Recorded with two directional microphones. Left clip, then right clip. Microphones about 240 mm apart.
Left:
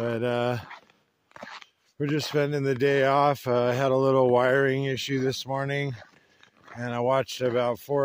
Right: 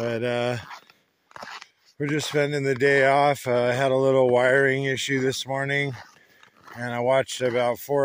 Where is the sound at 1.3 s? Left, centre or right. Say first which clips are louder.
Right 3 dB; right.